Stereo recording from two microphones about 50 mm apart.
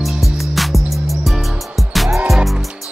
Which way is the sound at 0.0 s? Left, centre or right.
Centre.